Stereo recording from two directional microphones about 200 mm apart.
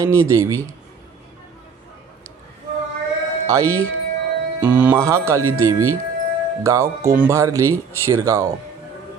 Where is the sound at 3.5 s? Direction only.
15° right (ahead or behind).